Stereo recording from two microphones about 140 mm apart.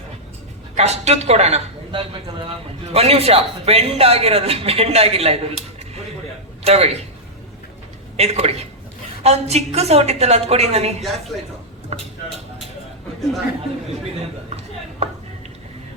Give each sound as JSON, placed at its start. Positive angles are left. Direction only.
{"t": 0.8, "sound": "speech", "side_deg": -50}
{"t": 1.9, "sound": "a man's voice", "side_deg": -35}
{"t": 6.7, "sound": "speech", "side_deg": -50}
{"t": 8.1, "sound": "speech", "side_deg": -50}
{"t": 14.5, "sound": "a sound", "side_deg": -50}